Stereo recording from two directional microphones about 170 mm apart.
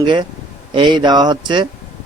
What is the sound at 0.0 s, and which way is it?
A man's voice, 25° right (ahead or behind).